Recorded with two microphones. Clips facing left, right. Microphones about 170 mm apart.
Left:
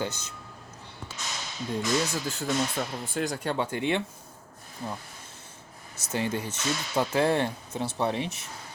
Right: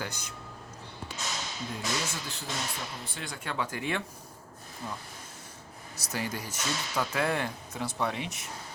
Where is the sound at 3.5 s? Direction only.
30° left (ahead or behind).